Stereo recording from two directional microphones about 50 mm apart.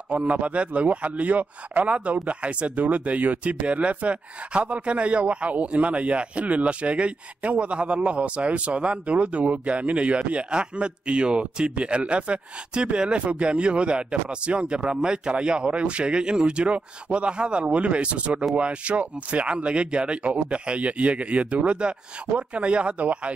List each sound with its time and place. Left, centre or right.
0.1 s speech: right